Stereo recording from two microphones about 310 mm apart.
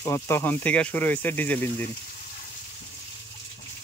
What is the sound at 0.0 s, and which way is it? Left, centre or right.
Speech, centre.